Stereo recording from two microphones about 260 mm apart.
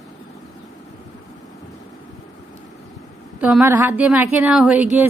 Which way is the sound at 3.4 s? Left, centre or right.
Centre.